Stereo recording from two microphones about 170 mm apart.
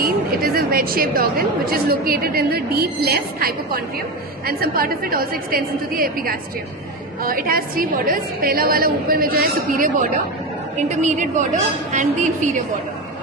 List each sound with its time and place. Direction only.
0.0 s a woman's voice: 60° right (ahead or behind)